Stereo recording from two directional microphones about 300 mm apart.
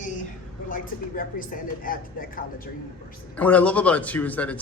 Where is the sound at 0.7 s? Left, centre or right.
Left.